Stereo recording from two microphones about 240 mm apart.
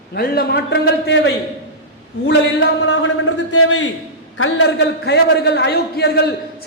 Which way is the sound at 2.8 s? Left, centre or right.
Left.